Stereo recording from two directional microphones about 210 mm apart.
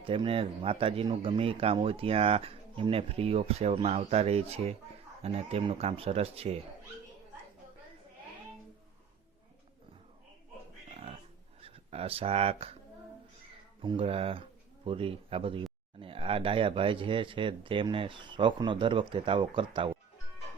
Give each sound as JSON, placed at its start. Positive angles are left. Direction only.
{"t": 0.0, "sound": "speech", "side_deg": -25}
{"t": 10.9, "sound": "a sound", "side_deg": -30}
{"t": 11.6, "sound": "speech", "side_deg": -30}
{"t": 13.8, "sound": "speech", "side_deg": -25}